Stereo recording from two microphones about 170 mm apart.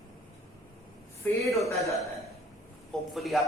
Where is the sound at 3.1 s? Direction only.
Centre (ahead or behind).